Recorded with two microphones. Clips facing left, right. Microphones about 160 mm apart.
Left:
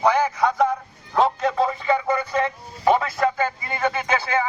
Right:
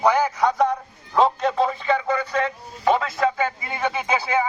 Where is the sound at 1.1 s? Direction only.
Centre (ahead or behind).